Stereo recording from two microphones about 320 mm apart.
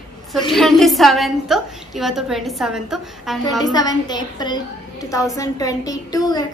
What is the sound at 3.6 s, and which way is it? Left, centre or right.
A woman's voice, centre.